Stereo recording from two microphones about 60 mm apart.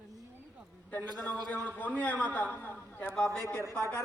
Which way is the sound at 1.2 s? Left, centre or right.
Left.